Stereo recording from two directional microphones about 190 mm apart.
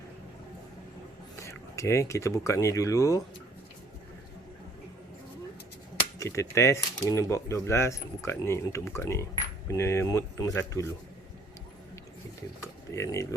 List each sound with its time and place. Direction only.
1.4 s speech: 15° left (ahead or behind)
6.1 s speech: 15° left (ahead or behind)
12.9 s speech: 15° left (ahead or behind)